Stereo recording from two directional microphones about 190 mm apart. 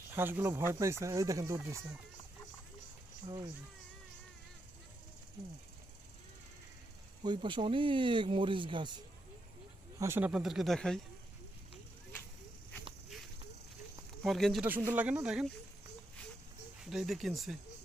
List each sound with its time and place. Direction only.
0.1 s speech: 10° right (ahead or behind)
3.2 s speech: 25° right (ahead or behind)
7.2 s speech: 25° right (ahead or behind)
10.0 s speech: 10° right (ahead or behind)
14.3 s speech: centre (ahead or behind)
16.8 s speech: centre (ahead or behind)